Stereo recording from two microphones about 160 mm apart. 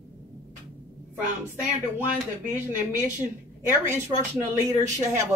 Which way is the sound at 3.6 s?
15° right (ahead or behind).